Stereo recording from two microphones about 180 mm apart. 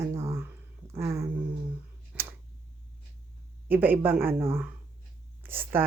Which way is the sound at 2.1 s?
5° right (ahead or behind).